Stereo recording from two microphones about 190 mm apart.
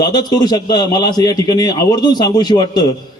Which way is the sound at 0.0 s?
20° left (ahead or behind).